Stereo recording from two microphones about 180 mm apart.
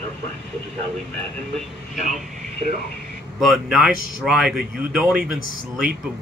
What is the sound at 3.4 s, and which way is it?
Speech, centre (ahead or behind).